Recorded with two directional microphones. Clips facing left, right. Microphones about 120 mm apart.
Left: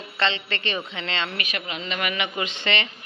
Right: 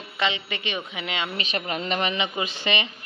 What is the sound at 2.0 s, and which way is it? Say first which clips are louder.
Speech: right 1 dB; 20° right (ahead or behind).